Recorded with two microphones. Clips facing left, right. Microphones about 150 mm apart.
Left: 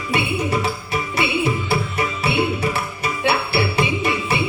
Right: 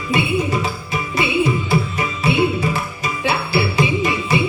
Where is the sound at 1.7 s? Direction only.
65° left (ahead or behind).